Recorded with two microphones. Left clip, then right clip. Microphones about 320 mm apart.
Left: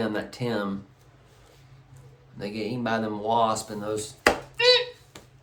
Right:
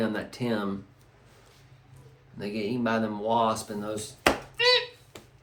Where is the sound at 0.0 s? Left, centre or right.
Centre.